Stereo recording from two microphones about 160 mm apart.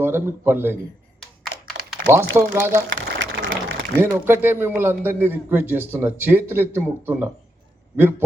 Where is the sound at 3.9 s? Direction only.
15° right (ahead or behind).